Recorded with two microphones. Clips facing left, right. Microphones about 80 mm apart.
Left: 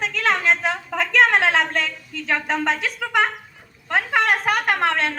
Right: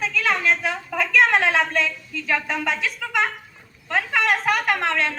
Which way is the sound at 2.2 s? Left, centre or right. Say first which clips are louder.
Left 2 dB; left.